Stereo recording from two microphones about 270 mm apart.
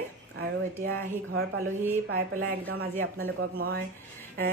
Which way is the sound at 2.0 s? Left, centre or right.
Right.